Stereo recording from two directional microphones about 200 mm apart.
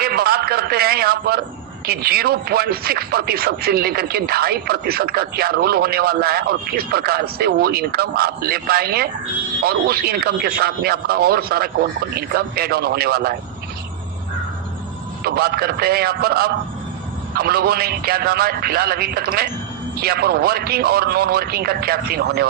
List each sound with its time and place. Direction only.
0.0 s a sound: 50° right (ahead or behind)
1.9 s speech: 50° right (ahead or behind)
15.2 s speech: 50° right (ahead or behind)